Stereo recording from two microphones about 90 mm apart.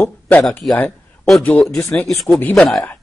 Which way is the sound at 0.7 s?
20° left (ahead or behind).